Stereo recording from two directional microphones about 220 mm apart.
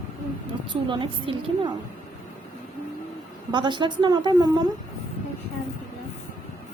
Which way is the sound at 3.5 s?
20° right (ahead or behind).